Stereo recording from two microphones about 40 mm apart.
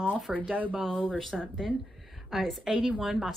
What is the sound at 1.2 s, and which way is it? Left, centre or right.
Speech, centre.